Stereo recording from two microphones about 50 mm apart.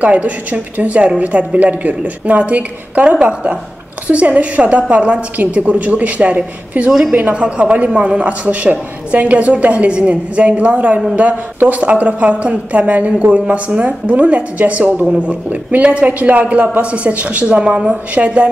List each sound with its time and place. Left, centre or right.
0.0 s a woman's voice: right
6.9 s a woman's voice: centre
7.2 s a woman's voice: right